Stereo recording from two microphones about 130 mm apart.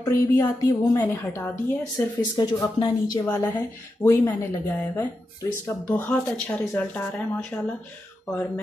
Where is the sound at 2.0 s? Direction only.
30° left (ahead or behind).